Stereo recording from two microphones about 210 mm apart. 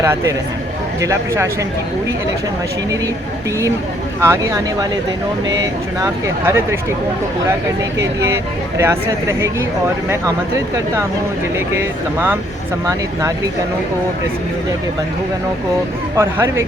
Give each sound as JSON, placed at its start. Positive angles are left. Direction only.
{"t": 0.0, "sound": "speech", "side_deg": -10}
{"t": 4.2, "sound": "speech", "side_deg": -15}
{"t": 7.9, "sound": "speech", "side_deg": -15}
{"t": 11.8, "sound": "speech", "side_deg": -10}
{"t": 16.1, "sound": "speech", "side_deg": -15}